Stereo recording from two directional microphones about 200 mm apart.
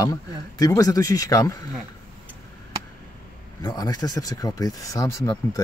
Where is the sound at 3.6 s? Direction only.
20° left (ahead or behind).